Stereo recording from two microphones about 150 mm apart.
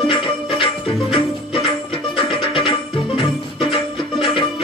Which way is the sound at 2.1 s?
35° left (ahead or behind).